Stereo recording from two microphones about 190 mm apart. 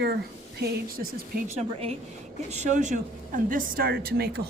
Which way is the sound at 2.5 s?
40° right (ahead or behind).